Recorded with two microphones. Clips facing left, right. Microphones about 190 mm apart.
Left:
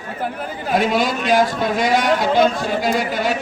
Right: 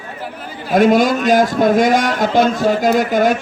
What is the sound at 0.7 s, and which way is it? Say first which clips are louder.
A man's voice: right 7 dB; 45° right (ahead or behind).